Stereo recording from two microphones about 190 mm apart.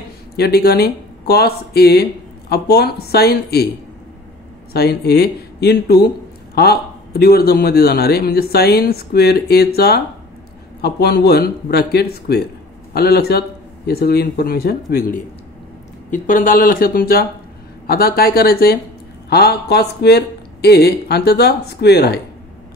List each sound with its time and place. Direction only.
0.4 s a man's voice: 55° left (ahead or behind)
4.7 s a man's voice: 55° left (ahead or behind)